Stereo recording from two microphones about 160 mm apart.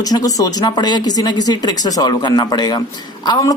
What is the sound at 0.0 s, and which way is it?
Speech, 25° left (ahead or behind).